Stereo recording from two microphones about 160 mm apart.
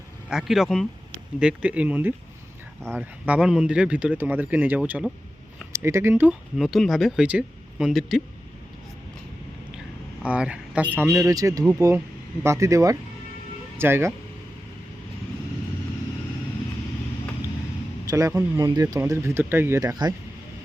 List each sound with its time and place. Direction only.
0.3 s speech: centre (ahead or behind)
6.6 s speech: centre (ahead or behind)
10.2 s speech: 5° right (ahead or behind)
18.0 s speech: 20° right (ahead or behind)